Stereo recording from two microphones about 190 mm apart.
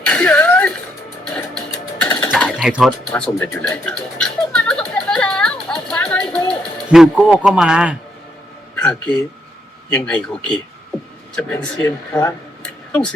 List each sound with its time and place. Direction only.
0.0 s a sound: 5° left (ahead or behind)
1.3 s music: 5° left (ahead or behind)
2.0 s sewing machine: 25° left (ahead or behind)
2.3 s sewing machine: 5° left (ahead or behind)
3.1 s a sound: 10° left (ahead or behind)
9.9 s speech: 5° left (ahead or behind)